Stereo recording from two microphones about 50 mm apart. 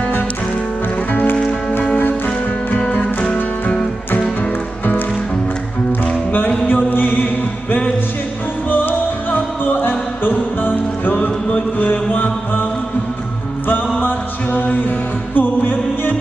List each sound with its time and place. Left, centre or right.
2.9 s music: left
6.5 s music: left
6.9 s music: left
8.6 s music: left
13.9 s music: left